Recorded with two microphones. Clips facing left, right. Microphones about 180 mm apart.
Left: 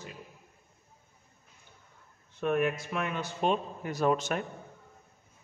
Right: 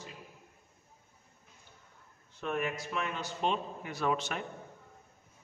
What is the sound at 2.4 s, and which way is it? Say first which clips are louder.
A man's voice: left 6 dB; 55° left (ahead or behind).